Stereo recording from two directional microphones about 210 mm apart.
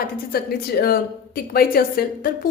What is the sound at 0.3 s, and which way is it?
A woman's voice, 45° left (ahead or behind).